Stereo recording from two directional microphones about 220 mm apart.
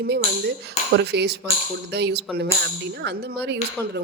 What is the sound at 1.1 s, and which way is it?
A woman's voice, 50° right (ahead or behind).